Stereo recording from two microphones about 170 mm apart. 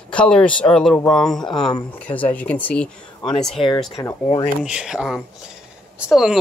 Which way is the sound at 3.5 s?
30° left (ahead or behind).